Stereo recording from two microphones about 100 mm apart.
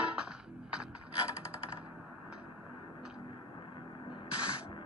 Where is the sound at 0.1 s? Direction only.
10° right (ahead or behind).